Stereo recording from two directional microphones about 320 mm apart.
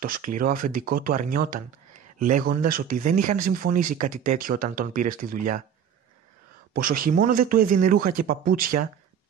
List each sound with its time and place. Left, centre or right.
0.4 s speech: right
6.7 s speech: right